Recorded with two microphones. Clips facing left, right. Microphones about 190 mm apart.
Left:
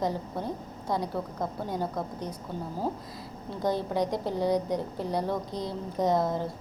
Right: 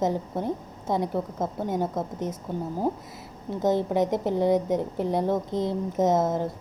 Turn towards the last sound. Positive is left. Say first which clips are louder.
# right 3 dB
turn(degrees=-20)  # may be behind; listen again after turning